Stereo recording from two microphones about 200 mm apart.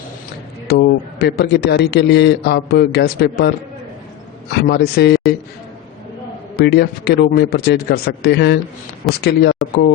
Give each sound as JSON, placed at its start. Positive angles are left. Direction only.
{"t": 0.7, "sound": "a man's voice", "side_deg": 55}
{"t": 4.5, "sound": "a man's voice", "side_deg": 55}
{"t": 6.6, "sound": "a man's voice", "side_deg": 55}